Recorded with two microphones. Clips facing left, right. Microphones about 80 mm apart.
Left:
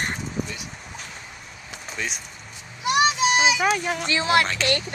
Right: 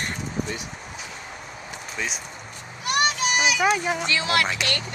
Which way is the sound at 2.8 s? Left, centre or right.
Centre.